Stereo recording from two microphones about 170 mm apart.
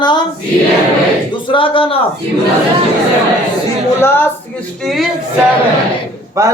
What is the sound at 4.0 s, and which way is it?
Speech, 15° left (ahead or behind).